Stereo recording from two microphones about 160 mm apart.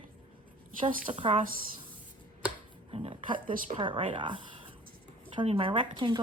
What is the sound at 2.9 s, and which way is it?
Speech, 35° right (ahead or behind).